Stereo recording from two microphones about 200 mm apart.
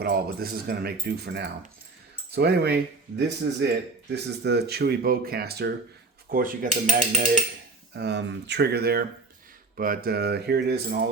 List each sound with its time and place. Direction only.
0.0 s speech: 50° right (ahead or behind)
7.9 s speech: 60° right (ahead or behind)